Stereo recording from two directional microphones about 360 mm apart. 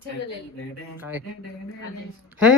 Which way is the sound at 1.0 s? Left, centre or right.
Centre.